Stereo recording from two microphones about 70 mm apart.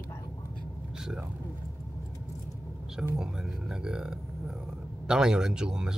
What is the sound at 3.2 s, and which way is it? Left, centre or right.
A man's voice, centre.